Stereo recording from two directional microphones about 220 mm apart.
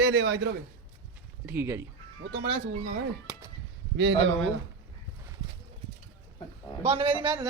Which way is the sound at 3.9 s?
55° right (ahead or behind).